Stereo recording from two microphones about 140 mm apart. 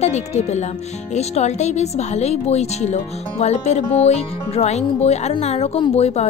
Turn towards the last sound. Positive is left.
turn(degrees=50)  # may be behind; listen again after turning